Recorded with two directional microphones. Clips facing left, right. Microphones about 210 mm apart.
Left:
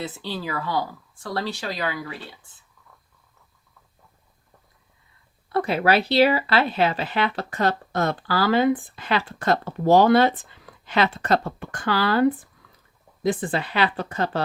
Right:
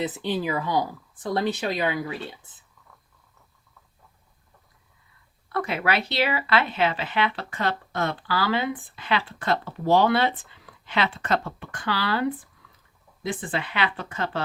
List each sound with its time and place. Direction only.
0.0 s speech: 20° right (ahead or behind)
5.5 s speech: 30° left (ahead or behind)
13.2 s speech: 40° left (ahead or behind)